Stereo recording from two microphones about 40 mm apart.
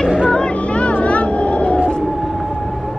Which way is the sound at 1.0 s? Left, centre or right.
Left.